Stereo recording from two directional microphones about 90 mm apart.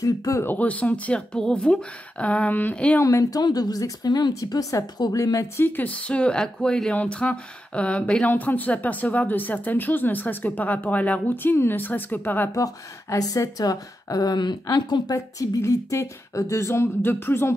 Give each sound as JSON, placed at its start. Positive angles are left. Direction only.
{"t": 0.0, "sound": "speech", "side_deg": 40}
{"t": 0.4, "sound": "speech", "side_deg": 20}
{"t": 3.0, "sound": "speech", "side_deg": 35}
{"t": 5.6, "sound": "speech", "side_deg": 20}
{"t": 12.5, "sound": "speech", "side_deg": 40}
{"t": 15.1, "sound": "speech", "side_deg": 40}